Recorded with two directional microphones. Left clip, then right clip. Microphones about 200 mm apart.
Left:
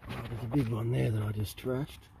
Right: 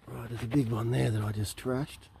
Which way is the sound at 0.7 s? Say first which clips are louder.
Right 2 dB; 10° right (ahead or behind).